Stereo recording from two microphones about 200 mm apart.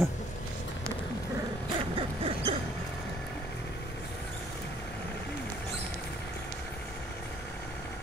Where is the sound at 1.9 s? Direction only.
25° right (ahead or behind).